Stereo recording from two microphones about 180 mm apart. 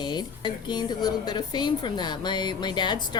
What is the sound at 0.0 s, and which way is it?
A woman's voice, 25° left (ahead or behind).